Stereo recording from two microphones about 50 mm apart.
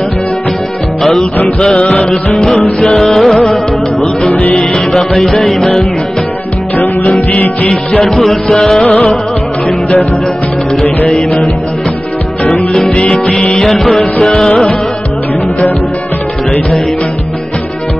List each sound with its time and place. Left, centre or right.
1.8 s music: centre
2.3 s music: centre
4.2 s music: left
4.6 s music: centre
7.1 s music: left
8.0 s music: centre
13.1 s music: centre